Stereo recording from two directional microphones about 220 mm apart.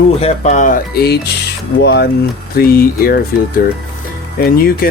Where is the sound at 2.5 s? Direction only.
40° left (ahead or behind).